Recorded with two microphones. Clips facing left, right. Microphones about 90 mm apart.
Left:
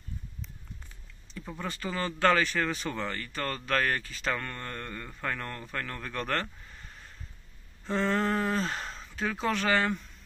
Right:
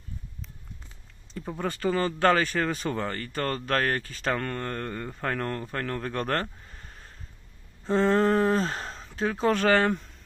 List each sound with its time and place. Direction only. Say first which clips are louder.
1.3 s speech: right 6 dB; 35° right (ahead or behind)
7.9 s speech: right 6 dB; 40° right (ahead or behind)